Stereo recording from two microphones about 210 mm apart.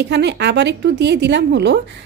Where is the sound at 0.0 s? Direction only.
55° right (ahead or behind).